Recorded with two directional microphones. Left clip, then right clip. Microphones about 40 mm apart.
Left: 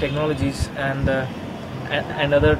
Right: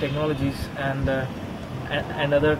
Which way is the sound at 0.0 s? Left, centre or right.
Centre.